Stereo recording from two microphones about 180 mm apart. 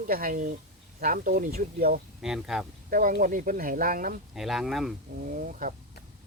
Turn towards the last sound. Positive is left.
turn(degrees=-45)  # may be behind; listen again after turning